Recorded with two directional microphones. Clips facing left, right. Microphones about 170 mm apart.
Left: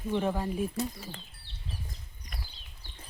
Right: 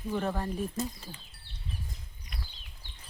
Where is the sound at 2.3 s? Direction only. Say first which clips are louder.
Even; 45° left (ahead or behind).